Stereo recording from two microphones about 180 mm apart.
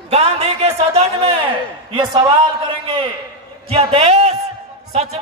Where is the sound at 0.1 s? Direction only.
35° right (ahead or behind).